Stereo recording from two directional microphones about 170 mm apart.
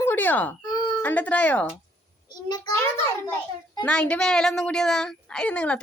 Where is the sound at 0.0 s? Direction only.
10° left (ahead or behind).